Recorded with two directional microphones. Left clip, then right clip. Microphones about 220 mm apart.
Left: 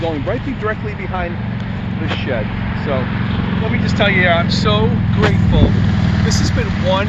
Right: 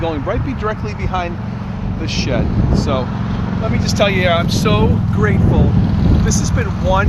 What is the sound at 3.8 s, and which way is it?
Speech, 50° right (ahead or behind).